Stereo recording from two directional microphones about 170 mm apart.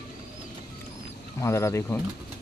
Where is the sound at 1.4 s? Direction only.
15° left (ahead or behind).